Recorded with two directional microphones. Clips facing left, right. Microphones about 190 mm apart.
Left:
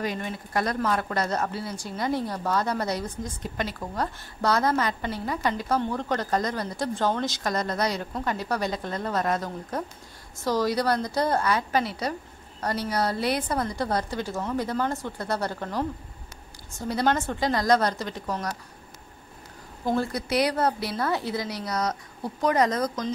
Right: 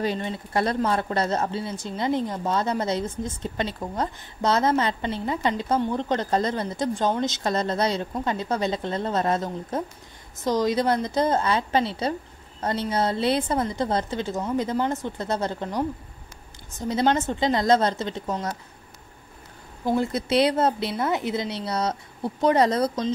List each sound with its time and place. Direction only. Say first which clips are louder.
0.0 s a woman's voice: right 3 dB; 30° right (ahead or behind)
20.0 s a woman's voice: right 4 dB; 25° right (ahead or behind)